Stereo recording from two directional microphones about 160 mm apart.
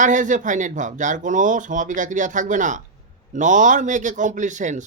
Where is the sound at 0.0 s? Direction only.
50° right (ahead or behind).